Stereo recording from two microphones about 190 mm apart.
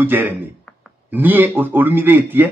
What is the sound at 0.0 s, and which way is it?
Speech, 10° right (ahead or behind).